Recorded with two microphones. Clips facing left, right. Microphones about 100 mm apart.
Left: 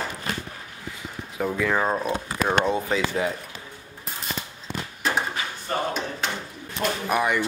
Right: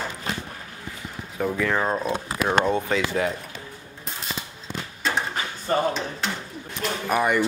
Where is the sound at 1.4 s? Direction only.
5° left (ahead or behind).